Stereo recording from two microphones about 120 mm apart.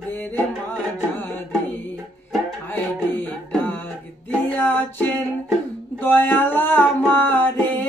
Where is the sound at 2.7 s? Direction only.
15° left (ahead or behind).